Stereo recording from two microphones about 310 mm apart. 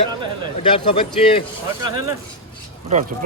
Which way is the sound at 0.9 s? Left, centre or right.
Centre.